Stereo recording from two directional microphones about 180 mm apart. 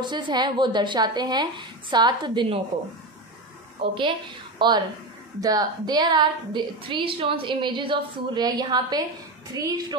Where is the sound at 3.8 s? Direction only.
25° right (ahead or behind).